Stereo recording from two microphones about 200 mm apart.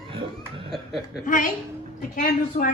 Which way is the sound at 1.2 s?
40° left (ahead or behind).